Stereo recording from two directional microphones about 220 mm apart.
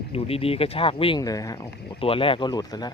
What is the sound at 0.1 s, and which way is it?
Speech, 25° left (ahead or behind).